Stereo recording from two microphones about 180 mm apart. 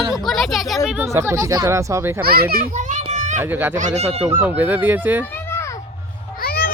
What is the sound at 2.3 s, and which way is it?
Speech, 60° right (ahead or behind).